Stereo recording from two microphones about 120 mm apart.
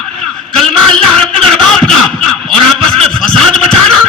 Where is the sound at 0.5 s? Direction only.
5° left (ahead or behind).